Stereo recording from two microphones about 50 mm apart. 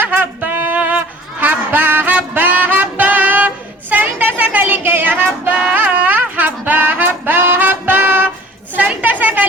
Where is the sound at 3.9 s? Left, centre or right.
Right.